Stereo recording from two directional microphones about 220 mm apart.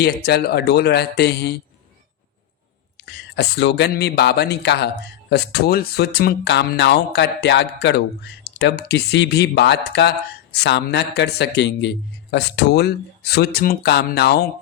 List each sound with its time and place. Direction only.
0.0 s speech: 45° left (ahead or behind)
3.0 s speech: 50° left (ahead or behind)